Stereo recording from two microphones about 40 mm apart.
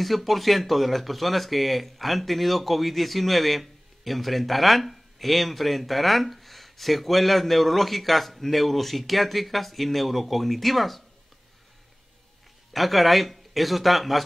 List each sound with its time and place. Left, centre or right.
0.0 s speech: centre
12.7 s speech: centre